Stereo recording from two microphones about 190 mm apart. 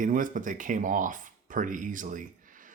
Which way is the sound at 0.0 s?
45° right (ahead or behind).